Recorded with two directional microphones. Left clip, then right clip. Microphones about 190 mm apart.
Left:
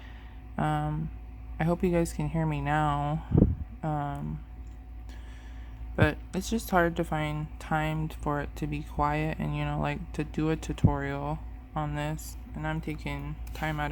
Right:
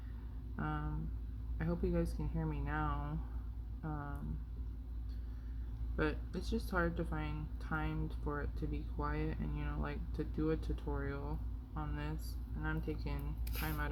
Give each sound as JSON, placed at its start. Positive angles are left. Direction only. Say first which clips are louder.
{"t": 0.5, "sound": "a woman's voice", "louder": "left 13 dB", "side_deg": 55}
{"t": 6.0, "sound": "a woman's voice", "louder": "left 11 dB", "side_deg": 55}